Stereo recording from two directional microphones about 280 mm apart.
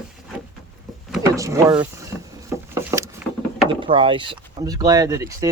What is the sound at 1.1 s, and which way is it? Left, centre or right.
Speech, centre.